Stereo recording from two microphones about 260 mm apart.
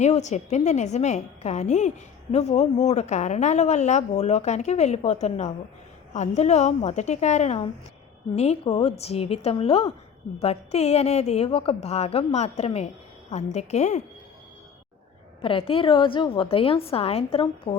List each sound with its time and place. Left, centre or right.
0.0 s a woman's voice: left
15.4 s a woman's voice: left